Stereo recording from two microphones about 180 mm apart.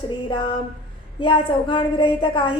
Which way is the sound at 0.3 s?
30° left (ahead or behind).